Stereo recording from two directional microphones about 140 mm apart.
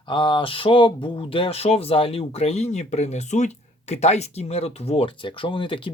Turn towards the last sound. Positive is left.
turn(degrees=40)  # may be behind; listen again after turning